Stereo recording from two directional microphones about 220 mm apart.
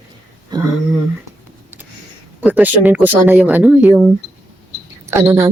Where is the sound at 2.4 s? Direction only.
5° right (ahead or behind).